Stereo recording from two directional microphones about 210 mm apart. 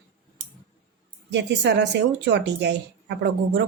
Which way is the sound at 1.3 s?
55° right (ahead or behind).